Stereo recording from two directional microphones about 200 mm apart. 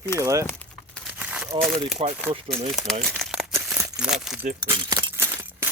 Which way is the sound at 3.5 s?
5° right (ahead or behind).